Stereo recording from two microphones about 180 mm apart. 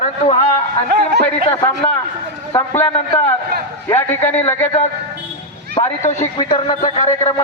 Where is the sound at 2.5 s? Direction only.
15° left (ahead or behind).